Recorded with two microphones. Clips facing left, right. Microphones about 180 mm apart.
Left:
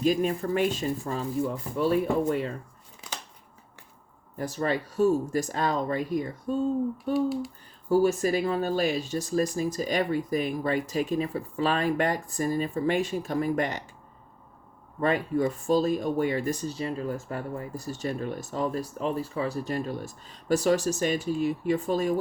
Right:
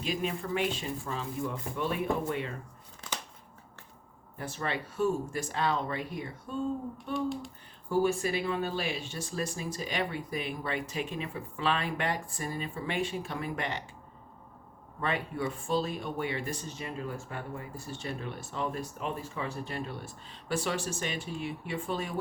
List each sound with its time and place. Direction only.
0.0 s speech: 45° left (ahead or behind)
4.4 s speech: 40° left (ahead or behind)
7.0 s a sound: 5° left (ahead or behind)
7.9 s speech: 40° left (ahead or behind)
15.0 s speech: 40° left (ahead or behind)